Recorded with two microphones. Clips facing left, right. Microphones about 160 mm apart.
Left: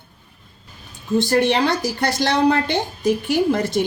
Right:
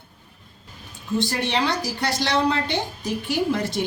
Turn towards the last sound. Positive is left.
turn(degrees=50)  # may be behind; listen again after turning